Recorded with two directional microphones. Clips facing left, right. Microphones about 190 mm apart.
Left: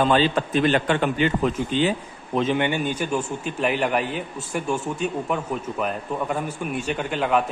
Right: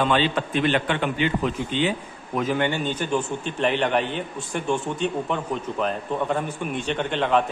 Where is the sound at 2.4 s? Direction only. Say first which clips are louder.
Left 1 dB; 20° left (ahead or behind).